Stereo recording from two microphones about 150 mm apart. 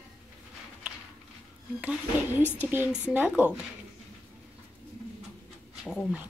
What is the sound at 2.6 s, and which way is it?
A woman's voice, 15° right (ahead or behind).